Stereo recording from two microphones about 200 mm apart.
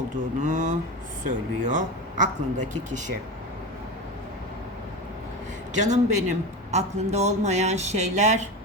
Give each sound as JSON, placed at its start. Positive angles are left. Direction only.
{"t": 0.4, "sound": "a man's voice", "side_deg": -40}
{"t": 5.7, "sound": "a man's voice", "side_deg": -35}